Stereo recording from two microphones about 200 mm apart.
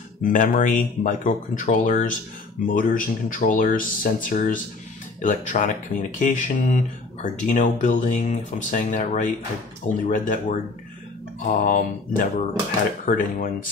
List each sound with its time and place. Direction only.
0.2 s speech: 40° left (ahead or behind)